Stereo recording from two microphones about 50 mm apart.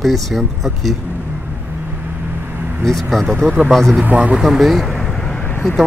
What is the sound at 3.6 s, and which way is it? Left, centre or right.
Speech, centre.